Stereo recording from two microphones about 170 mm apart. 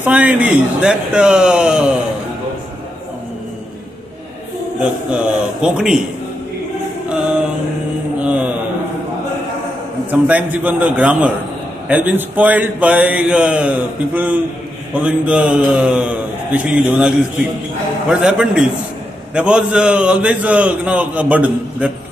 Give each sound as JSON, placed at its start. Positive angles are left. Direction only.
{"t": 0.0, "sound": "a man's voice", "side_deg": -10}
{"t": 5.1, "sound": "speech", "side_deg": -5}
{"t": 7.1, "sound": "music", "side_deg": -5}
{"t": 8.2, "sound": "mantra", "side_deg": -10}
{"t": 10.2, "sound": "a man's voice", "side_deg": -10}
{"t": 18.2, "sound": "a man's voice", "side_deg": -5}